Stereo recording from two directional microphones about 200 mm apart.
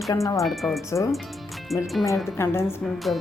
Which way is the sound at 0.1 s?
15° left (ahead or behind).